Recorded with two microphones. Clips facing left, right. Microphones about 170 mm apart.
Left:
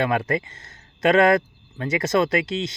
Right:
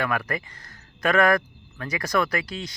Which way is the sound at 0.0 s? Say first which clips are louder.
Left 5 dB; 25° left (ahead or behind).